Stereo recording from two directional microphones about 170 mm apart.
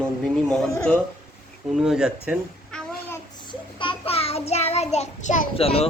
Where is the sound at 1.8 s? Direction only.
5° right (ahead or behind).